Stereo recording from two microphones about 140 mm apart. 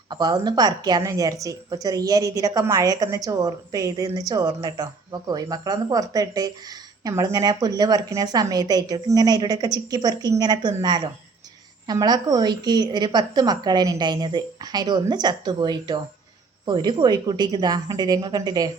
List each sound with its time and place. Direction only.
0.1 s a woman's voice: 30° right (ahead or behind)